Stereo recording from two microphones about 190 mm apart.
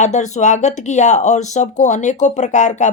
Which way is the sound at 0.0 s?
40° left (ahead or behind).